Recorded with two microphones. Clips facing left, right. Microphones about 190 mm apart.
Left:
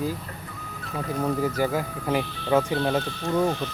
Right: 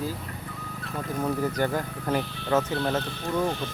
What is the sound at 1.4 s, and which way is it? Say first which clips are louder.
Speech: left 2 dB; 10° left (ahead or behind).